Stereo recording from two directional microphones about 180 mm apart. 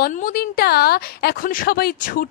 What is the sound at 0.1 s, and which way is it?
A woman's voice, 50° left (ahead or behind).